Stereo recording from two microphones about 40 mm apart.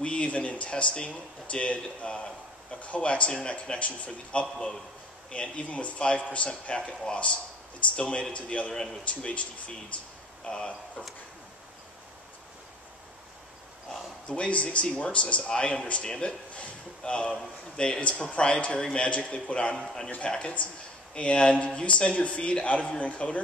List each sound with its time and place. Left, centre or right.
0.0 s speech: left
10.4 s speech: left
14.2 s speech: left
19.8 s a man's voice: centre
20.2 s speech: left